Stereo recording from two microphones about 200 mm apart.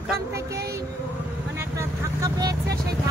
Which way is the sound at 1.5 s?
15° right (ahead or behind).